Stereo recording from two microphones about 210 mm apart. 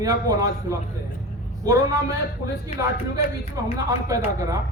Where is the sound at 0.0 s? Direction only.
15° right (ahead or behind).